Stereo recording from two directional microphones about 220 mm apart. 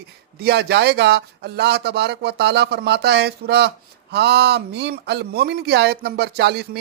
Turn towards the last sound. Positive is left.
turn(degrees=-50)  # may be behind; listen again after turning